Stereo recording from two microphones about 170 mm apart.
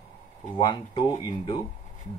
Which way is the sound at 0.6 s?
25° left (ahead or behind).